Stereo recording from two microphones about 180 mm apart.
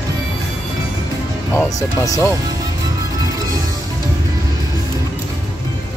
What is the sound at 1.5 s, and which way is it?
Speech, 15° left (ahead or behind).